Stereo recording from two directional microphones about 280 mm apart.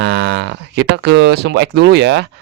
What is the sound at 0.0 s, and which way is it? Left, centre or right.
Speech, right.